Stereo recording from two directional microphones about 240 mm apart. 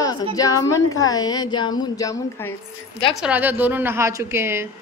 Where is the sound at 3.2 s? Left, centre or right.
Centre.